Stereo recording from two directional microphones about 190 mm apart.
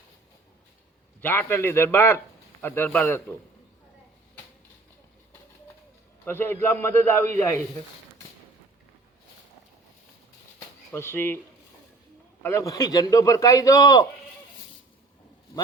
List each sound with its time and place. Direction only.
1.2 s a man's voice: 10° left (ahead or behind)
6.2 s a man's voice: 10° left (ahead or behind)
10.9 s a man's voice: 10° left (ahead or behind)
12.4 s a man's voice: 15° left (ahead or behind)